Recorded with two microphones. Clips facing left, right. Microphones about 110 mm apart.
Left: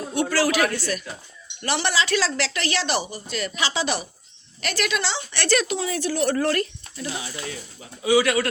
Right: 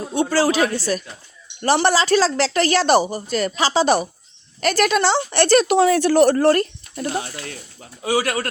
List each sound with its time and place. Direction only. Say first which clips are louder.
0.1 s a woman's voice: right 4 dB; 30° right (ahead or behind)
5.6 s speech: right 11 dB; 60° right (ahead or behind)
6.2 s speech: right 7 dB; 40° right (ahead or behind)
6.9 s a woman's voice: right 8 dB; 50° right (ahead or behind)